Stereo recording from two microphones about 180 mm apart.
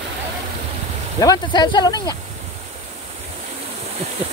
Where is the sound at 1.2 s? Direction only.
20° left (ahead or behind).